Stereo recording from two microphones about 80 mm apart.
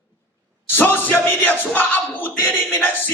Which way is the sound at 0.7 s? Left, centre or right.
Left.